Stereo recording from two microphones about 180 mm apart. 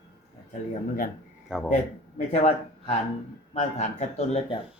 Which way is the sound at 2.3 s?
35° left (ahead or behind).